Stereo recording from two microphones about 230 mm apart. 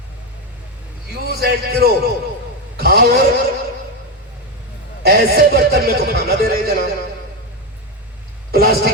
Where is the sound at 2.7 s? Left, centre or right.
Right.